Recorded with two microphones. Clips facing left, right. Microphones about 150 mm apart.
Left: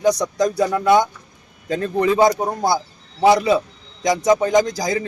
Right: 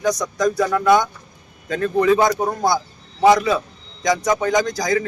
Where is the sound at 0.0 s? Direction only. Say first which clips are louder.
Left 2 dB; 30° left (ahead or behind).